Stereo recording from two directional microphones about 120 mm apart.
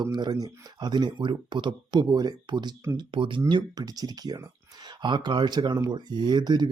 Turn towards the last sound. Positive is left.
turn(degrees=-35)  # may be behind; listen again after turning